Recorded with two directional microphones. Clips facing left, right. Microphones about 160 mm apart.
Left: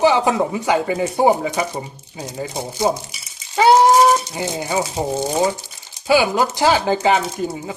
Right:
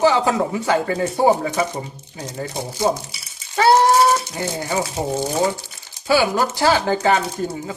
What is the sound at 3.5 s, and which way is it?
Rattle, 15° left (ahead or behind).